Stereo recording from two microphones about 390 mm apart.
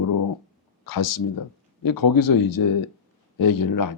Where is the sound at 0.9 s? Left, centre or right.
Left.